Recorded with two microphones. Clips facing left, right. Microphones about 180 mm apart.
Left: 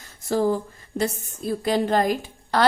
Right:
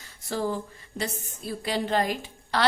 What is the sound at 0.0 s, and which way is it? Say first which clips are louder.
A woman's voice: left 7 dB; 45° left (ahead or behind).